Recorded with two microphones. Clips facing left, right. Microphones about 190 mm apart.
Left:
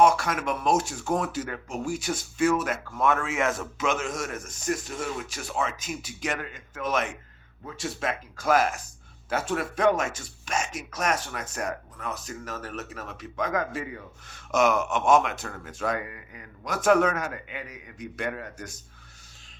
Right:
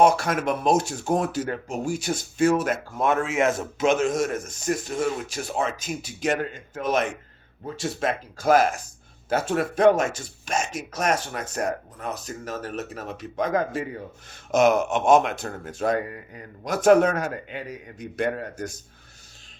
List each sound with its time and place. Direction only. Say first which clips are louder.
0.0 s speech: right 2 dB; 30° right (ahead or behind)